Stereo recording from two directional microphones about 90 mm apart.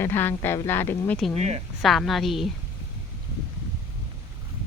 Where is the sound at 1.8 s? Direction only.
Centre (ahead or behind).